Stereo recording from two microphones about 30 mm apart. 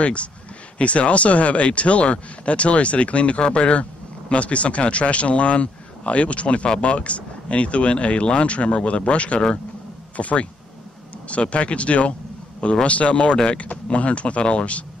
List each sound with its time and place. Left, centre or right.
0.0 s speech: left
3.3 s speech: left